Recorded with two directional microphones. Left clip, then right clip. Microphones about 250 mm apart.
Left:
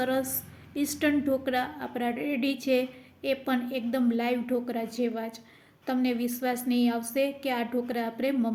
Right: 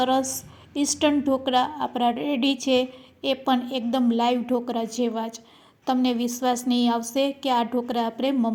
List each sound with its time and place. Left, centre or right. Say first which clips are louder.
0.0 s a woman's voice: right 6 dB; right